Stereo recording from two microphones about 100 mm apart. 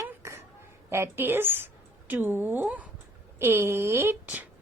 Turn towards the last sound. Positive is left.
turn(degrees=-15)  # may be behind; listen again after turning